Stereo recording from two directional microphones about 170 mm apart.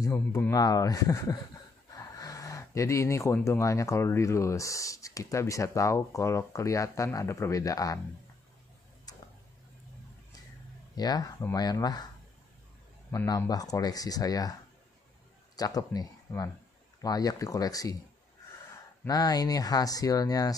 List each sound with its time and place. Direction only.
0.3 s speech: 20° left (ahead or behind)
11.0 s speech: 25° left (ahead or behind)
13.1 s speech: 15° left (ahead or behind)
15.5 s speech: 20° left (ahead or behind)
19.0 s speech: 20° left (ahead or behind)